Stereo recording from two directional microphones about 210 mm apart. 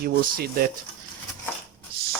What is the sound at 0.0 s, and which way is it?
Speech, 45° right (ahead or behind).